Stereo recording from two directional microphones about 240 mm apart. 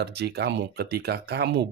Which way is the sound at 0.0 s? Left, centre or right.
Right.